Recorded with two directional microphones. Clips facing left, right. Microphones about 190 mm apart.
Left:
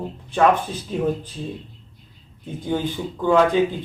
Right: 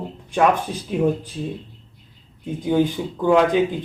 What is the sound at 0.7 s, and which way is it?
Speech, 10° right (ahead or behind).